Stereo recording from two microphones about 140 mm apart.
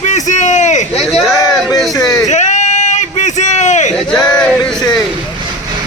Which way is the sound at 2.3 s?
55° left (ahead or behind).